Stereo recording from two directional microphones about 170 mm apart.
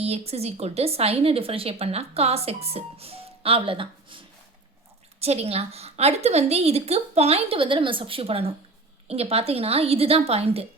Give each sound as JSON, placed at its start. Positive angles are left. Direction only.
{"t": 0.0, "sound": "a woman's voice", "side_deg": -35}
{"t": 5.2, "sound": "a woman's voice", "side_deg": -40}